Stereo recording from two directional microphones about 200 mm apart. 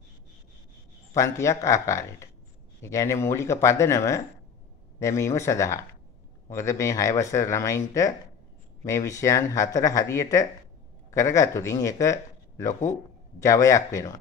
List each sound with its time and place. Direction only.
1.1 s speech: 15° left (ahead or behind)